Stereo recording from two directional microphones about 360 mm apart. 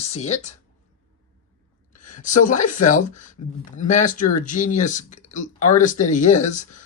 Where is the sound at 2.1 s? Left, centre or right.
Left.